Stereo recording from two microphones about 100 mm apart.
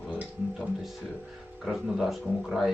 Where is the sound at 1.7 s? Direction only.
Centre (ahead or behind).